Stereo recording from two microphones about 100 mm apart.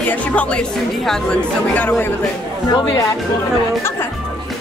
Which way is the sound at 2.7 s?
45° left (ahead or behind).